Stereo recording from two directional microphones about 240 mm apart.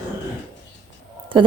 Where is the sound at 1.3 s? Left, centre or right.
Right.